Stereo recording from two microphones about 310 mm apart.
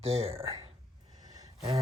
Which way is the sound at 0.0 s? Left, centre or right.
Centre.